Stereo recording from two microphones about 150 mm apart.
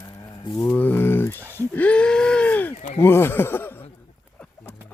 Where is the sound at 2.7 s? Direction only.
55° left (ahead or behind).